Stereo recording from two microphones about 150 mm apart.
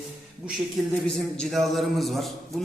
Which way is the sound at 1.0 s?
5° left (ahead or behind).